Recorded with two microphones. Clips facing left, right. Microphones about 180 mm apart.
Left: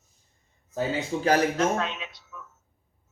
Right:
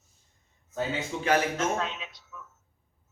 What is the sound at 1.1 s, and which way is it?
Speech, 40° left (ahead or behind).